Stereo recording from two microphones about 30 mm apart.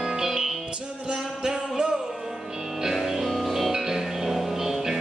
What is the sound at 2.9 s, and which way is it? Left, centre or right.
Music, centre.